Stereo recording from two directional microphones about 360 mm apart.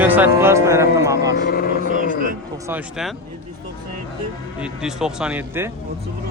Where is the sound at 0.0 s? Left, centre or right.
Centre.